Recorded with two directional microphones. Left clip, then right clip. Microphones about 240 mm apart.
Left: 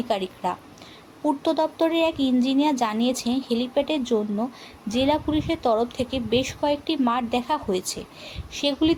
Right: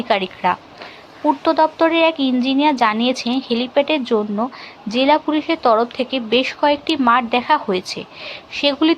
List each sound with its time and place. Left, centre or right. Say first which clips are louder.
0.1 s a woman's voice: right 9 dB; centre